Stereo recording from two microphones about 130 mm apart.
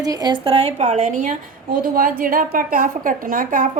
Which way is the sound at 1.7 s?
90° right.